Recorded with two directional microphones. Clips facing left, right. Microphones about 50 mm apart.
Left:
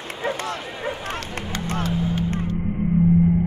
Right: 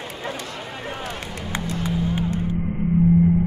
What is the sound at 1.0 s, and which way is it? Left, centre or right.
Run, left.